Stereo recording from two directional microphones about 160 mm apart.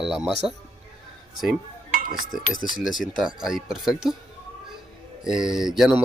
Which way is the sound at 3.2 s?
5° right (ahead or behind).